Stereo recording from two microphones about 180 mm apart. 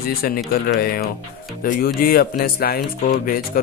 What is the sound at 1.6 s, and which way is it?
Speech, 50° left (ahead or behind).